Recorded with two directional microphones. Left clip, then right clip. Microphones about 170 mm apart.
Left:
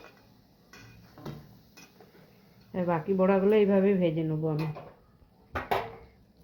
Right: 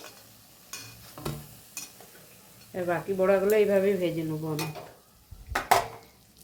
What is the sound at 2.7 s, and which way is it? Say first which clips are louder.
Speech: even; 35° left (ahead or behind).